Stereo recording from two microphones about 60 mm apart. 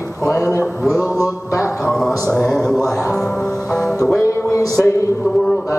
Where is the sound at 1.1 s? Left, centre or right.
Left.